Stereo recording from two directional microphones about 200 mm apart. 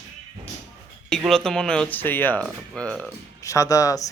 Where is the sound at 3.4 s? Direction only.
15° left (ahead or behind).